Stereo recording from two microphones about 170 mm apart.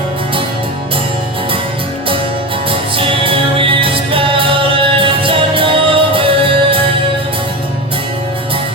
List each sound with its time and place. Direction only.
2.6 s music: 30° right (ahead or behind)